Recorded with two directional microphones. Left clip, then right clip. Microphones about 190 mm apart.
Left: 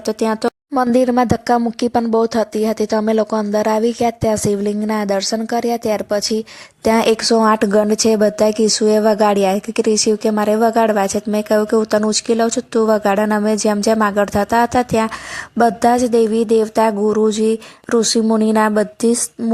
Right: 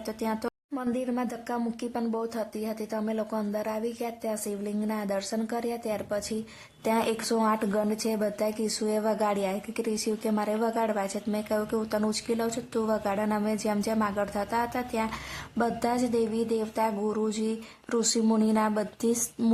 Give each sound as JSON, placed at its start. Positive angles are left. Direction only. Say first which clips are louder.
{"t": 0.0, "sound": "speech", "louder": "left 14 dB", "side_deg": 35}